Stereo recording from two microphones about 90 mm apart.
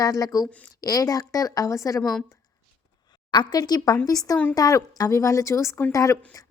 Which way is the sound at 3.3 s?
50° left (ahead or behind).